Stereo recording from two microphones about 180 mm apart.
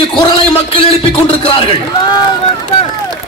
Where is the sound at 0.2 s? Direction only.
30° left (ahead or behind).